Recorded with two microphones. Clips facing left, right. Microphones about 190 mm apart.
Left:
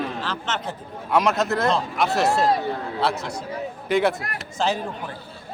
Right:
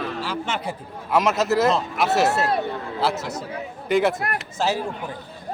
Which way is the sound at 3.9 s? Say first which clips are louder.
Right 1 dB; centre (ahead or behind).